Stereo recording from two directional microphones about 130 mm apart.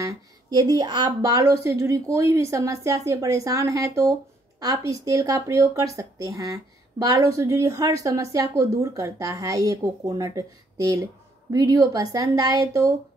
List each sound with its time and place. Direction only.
0.0 s speech: 30° right (ahead or behind)